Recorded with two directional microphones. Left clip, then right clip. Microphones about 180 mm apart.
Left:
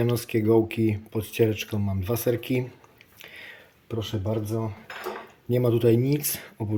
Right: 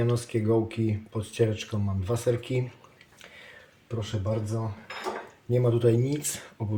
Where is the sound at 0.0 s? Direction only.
40° left (ahead or behind).